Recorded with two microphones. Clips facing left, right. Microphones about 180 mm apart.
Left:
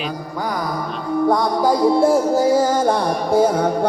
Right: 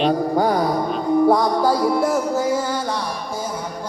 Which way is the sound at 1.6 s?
15° left (ahead or behind).